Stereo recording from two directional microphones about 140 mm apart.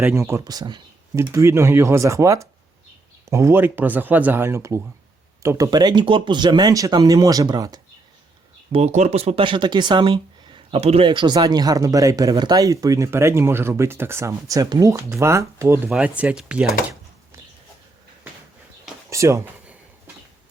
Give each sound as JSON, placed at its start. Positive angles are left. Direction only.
{"t": 0.0, "sound": "speech", "side_deg": -20}
{"t": 1.1, "sound": "speech", "side_deg": -20}
{"t": 8.7, "sound": "speech", "side_deg": -55}
{"t": 15.9, "sound": "speech", "side_deg": -10}
{"t": 19.1, "sound": "speech", "side_deg": -20}